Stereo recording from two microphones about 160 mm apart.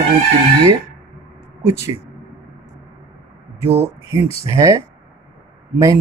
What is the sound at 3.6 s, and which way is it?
Speech, 15° right (ahead or behind).